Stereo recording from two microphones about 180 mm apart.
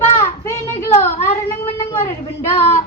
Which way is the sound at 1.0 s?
35° left (ahead or behind).